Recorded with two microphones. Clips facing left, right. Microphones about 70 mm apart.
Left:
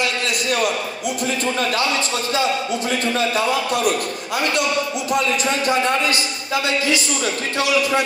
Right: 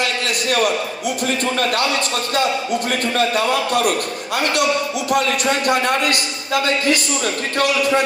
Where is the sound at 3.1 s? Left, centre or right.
Right.